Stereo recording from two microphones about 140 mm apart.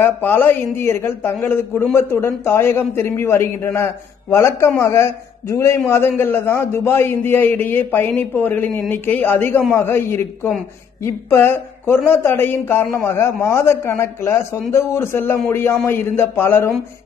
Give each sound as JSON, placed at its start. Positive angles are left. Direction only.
{"t": 0.0, "sound": "a man's voice", "side_deg": 15}